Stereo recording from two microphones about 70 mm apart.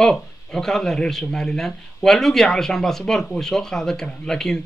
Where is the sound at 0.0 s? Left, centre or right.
Centre.